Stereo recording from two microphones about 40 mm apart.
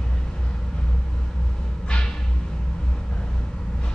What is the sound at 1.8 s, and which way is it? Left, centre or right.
Music, left.